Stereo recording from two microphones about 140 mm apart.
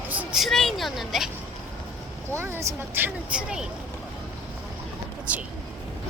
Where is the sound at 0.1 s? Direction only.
10° right (ahead or behind).